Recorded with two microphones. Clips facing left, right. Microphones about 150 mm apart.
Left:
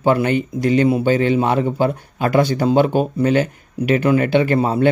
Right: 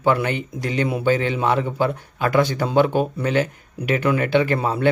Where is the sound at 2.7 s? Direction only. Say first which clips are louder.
Left 2 dB; 5° left (ahead or behind).